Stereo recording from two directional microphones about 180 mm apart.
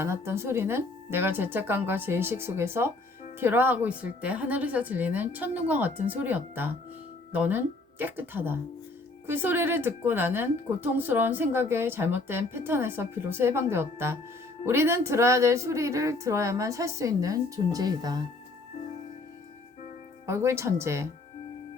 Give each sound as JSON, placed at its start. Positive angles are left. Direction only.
{"t": 0.0, "sound": "a woman's voice", "side_deg": -15}
{"t": 20.2, "sound": "a woman's voice", "side_deg": -15}